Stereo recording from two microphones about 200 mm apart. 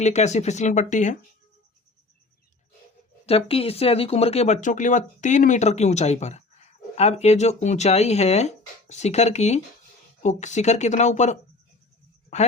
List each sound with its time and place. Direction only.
0.0 s speech: 35° left (ahead or behind)
3.2 s speech: 30° left (ahead or behind)